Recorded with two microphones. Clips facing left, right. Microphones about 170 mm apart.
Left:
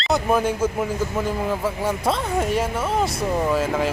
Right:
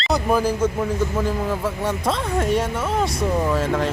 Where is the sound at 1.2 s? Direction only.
Centre (ahead or behind).